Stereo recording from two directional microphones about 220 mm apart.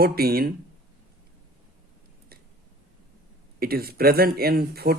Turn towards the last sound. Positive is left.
turn(degrees=-45)  # may be behind; listen again after turning